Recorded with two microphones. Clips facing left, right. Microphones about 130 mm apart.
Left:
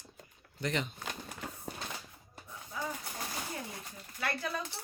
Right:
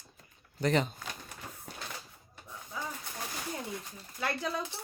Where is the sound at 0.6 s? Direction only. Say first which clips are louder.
Right 6 dB; 35° right (ahead or behind).